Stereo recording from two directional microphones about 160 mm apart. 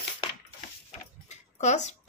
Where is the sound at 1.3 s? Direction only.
45° left (ahead or behind).